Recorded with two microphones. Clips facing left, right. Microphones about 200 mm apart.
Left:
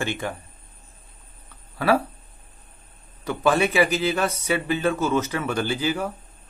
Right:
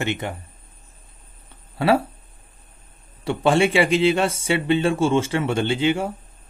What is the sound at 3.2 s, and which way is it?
Speech, 30° right (ahead or behind).